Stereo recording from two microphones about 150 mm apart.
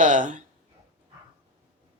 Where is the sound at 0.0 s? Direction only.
60° right (ahead or behind).